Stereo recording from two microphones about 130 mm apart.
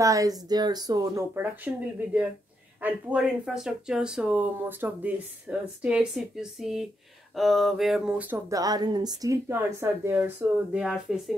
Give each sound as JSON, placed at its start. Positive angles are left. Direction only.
{"t": 0.0, "sound": "speech", "side_deg": -25}
{"t": 1.3, "sound": "speech", "side_deg": -15}
{"t": 2.8, "sound": "speech", "side_deg": -10}
{"t": 7.3, "sound": "a sound", "side_deg": 0}
{"t": 8.5, "sound": "speech", "side_deg": -30}